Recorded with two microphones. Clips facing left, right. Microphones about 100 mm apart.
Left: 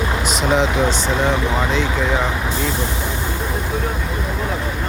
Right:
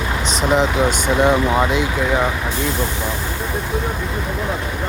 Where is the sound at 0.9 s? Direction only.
15° right (ahead or behind).